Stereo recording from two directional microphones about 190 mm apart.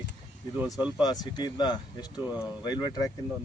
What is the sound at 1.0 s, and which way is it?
Speech, 20° left (ahead or behind).